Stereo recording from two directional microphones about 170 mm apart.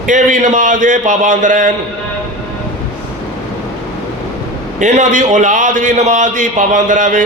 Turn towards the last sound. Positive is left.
turn(degrees=-50)  # may be behind; listen again after turning